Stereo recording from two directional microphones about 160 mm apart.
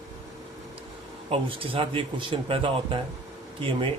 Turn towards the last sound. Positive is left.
turn(degrees=-35)  # may be behind; listen again after turning